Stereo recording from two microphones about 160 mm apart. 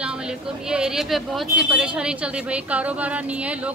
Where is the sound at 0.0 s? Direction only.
5° right (ahead or behind).